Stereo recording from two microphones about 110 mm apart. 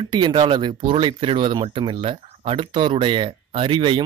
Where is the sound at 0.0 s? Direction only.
45° right (ahead or behind).